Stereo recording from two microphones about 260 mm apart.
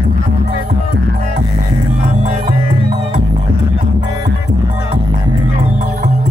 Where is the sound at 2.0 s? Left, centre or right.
Right.